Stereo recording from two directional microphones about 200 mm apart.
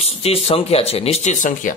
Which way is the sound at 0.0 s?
30° left (ahead or behind).